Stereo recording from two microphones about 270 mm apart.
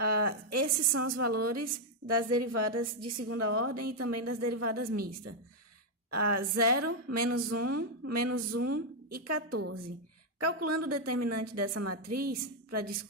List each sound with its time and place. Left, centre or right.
0.0 s a woman's voice: right
6.1 s a woman's voice: right
12.1 s a woman's voice: right